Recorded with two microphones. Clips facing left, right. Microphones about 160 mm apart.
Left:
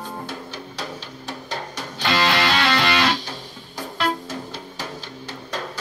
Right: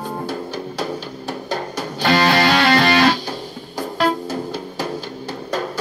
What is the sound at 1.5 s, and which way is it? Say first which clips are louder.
Music: right 7 dB; 45° right (ahead or behind).